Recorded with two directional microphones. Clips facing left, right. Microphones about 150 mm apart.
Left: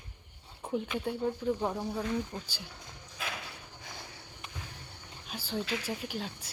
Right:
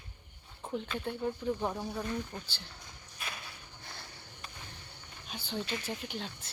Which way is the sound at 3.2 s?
90° left.